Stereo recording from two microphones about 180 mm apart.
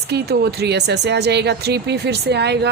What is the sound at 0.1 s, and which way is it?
Speech, 65° right (ahead or behind).